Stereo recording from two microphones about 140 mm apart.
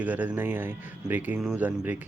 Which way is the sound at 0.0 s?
10° right (ahead or behind).